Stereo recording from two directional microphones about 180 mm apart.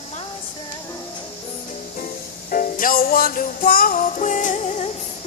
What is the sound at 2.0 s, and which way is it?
Music, 50° left (ahead or behind).